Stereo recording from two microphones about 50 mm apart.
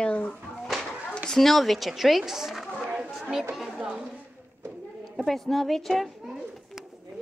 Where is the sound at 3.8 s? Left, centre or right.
Centre.